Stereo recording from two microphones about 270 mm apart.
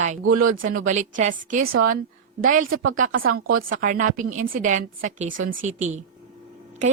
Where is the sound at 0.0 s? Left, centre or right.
Right.